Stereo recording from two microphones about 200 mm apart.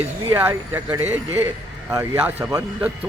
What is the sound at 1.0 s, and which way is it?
Speech, 35° right (ahead or behind).